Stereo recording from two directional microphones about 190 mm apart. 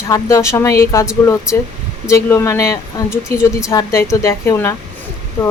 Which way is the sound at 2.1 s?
15° left (ahead or behind).